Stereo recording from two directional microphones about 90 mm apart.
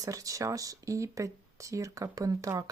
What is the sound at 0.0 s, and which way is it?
Speech, 40° right (ahead or behind).